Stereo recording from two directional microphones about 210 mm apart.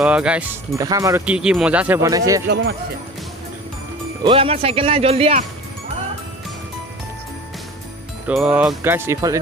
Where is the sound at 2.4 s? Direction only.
50° right (ahead or behind).